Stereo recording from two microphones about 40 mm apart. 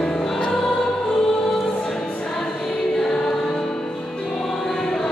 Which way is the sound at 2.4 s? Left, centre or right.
Centre.